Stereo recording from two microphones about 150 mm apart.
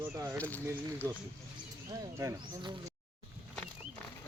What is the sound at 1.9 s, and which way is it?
Speech, 20° right (ahead or behind).